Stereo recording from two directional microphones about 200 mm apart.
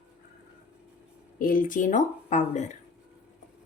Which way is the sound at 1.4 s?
45° left (ahead or behind).